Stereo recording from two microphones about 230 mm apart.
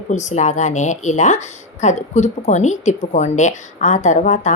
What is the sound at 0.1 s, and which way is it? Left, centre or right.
Speech, left.